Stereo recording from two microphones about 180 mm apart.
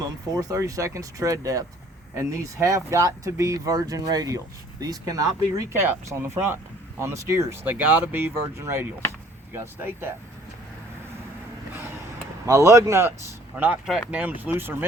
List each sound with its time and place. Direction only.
0.0 s speech: 20° right (ahead or behind)
12.5 s speech: 15° right (ahead or behind)